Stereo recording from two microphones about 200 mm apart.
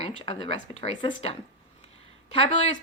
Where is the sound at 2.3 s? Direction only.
30° left (ahead or behind).